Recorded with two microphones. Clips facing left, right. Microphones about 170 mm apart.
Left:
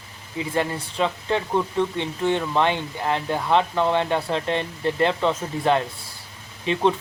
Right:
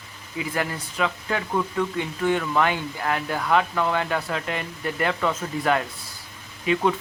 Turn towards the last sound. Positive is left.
turn(degrees=25)  # may be behind; listen again after turning